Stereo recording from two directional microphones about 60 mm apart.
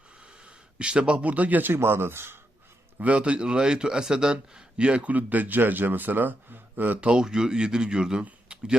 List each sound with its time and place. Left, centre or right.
0.4 s speech: centre; by 2.4 s right
3.0 s a man's voice: right
7.0 s speech: centre
8.2 s a sound: centre